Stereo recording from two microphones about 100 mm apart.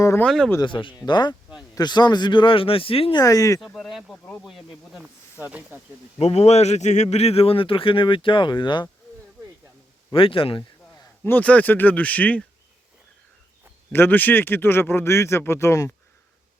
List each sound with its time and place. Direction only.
0.3 s speech: 5° left (ahead or behind)
0.6 s a man's voice: 55° left (ahead or behind)
3.2 s speech: 35° left (ahead or behind)
3.8 s speech: centre (ahead or behind)
5.4 s speech: 15° right (ahead or behind)
6.1 s a man's voice: 90° left; by 8.9 s 50° left (ahead or behind)
10.1 s a man's voice: 60° left (ahead or behind)
11.2 s speech: 20° left (ahead or behind)
13.9 s speech: 20° left (ahead or behind)